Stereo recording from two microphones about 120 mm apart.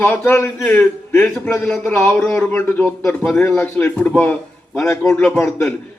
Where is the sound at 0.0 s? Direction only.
15° left (ahead or behind).